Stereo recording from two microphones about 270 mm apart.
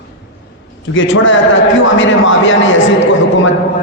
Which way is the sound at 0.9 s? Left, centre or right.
Left.